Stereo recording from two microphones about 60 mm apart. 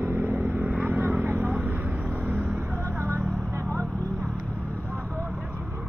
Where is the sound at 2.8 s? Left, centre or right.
Right.